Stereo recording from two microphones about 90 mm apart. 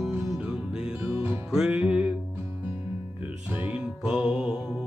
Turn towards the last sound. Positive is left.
turn(degrees=-5)  # may be behind; listen again after turning